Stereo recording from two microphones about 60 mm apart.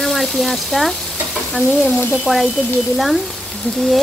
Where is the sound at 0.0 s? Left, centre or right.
Centre.